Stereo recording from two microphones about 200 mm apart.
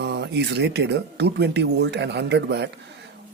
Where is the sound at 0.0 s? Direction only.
60° right (ahead or behind).